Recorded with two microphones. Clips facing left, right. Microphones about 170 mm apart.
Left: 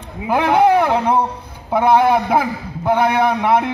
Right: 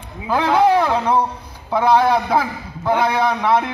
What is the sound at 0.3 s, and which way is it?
A man's voice, 20° left (ahead or behind).